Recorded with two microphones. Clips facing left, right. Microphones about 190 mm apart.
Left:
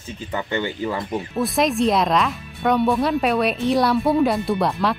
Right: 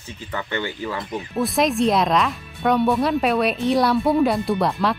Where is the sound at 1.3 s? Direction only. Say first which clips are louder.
Right 1 dB; centre (ahead or behind).